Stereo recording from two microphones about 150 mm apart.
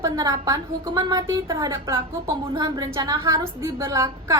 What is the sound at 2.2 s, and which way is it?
A woman's voice, 30° right (ahead or behind).